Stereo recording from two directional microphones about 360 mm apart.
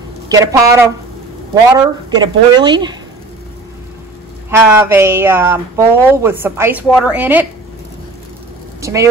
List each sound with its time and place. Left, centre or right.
0.3 s speech: centre
4.5 s speech: centre
8.8 s speech: centre